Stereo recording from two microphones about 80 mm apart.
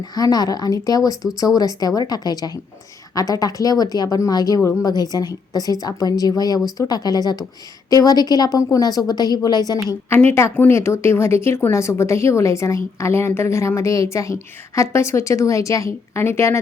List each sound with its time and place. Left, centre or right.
0.0 s a woman's voice: left
10.3 s speech: left